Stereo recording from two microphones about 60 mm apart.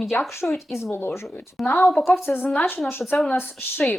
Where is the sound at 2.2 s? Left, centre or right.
Left.